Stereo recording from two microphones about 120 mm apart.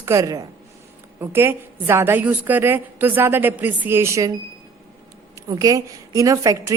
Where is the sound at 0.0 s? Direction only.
25° right (ahead or behind).